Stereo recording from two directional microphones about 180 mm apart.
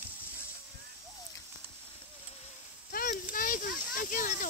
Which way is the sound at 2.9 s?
50° left (ahead or behind).